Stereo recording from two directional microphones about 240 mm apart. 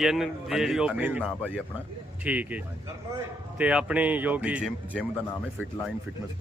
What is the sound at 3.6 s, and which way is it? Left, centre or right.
Speech, centre.